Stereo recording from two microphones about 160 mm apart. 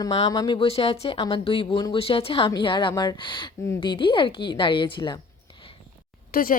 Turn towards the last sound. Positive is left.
turn(degrees=65)  # may be behind; listen again after turning